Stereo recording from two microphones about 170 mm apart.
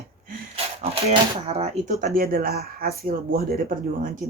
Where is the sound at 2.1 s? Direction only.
60° right (ahead or behind).